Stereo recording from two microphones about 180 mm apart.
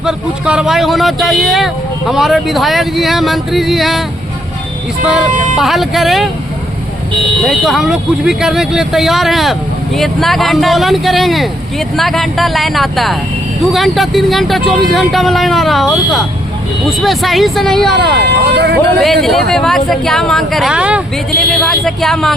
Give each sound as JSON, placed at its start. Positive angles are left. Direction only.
{"t": 0.0, "sound": "speech", "side_deg": -5}
{"t": 5.0, "sound": "speech", "side_deg": 0}
{"t": 7.4, "sound": "speech", "side_deg": 0}
{"t": 18.5, "sound": "speech", "side_deg": -65}
{"t": 18.9, "sound": "speech", "side_deg": 0}